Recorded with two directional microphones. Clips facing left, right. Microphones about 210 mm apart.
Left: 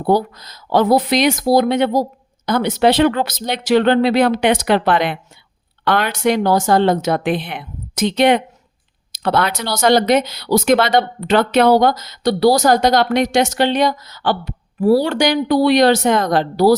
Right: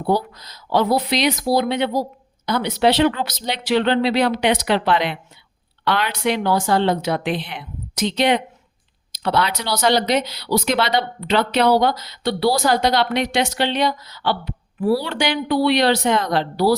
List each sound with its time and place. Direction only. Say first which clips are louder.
0.0 s speech: left 4 dB; 45° left (ahead or behind)